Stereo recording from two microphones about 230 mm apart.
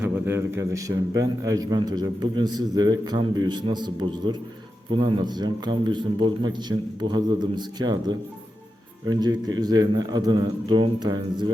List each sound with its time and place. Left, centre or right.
0.0 s a man's voice: centre